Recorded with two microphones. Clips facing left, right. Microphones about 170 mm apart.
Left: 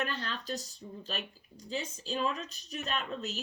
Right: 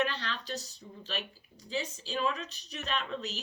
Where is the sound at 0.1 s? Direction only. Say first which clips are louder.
Left 1 dB; 45° left (ahead or behind).